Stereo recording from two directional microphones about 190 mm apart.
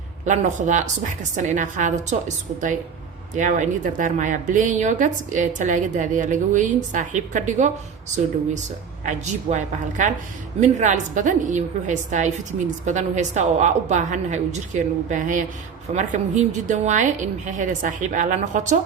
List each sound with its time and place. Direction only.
0.3 s a woman's voice: 40° right (ahead or behind)
9.0 s a woman's voice: 40° right (ahead or behind)